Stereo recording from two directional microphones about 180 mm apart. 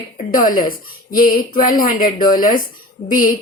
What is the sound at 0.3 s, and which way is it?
A woman's voice, 50° left (ahead or behind).